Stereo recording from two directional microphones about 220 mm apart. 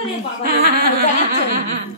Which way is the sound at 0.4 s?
45° right (ahead or behind).